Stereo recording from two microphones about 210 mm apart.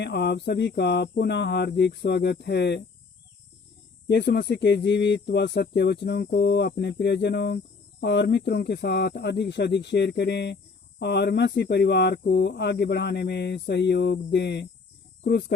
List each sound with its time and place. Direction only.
0.0 s speech: 50° left (ahead or behind)
4.1 s speech: 50° left (ahead or behind)